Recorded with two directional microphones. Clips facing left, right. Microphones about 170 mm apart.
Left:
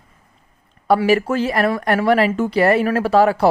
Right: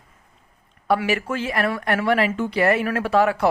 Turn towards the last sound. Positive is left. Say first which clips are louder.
# left 4 dB
turn(degrees=35)  # may be behind; listen again after turning